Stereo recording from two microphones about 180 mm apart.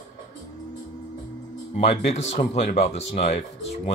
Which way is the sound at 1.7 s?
35° left (ahead or behind).